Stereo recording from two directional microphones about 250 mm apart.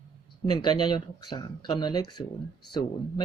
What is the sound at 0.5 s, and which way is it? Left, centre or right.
Speech, centre.